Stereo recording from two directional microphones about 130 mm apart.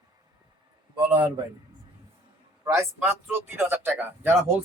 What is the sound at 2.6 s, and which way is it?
Speech, 20° right (ahead or behind).